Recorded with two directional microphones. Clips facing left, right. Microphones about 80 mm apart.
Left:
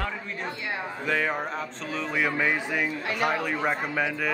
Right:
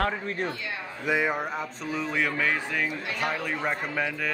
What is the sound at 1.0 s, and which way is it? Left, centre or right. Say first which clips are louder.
Speech: right 1 dB; centre.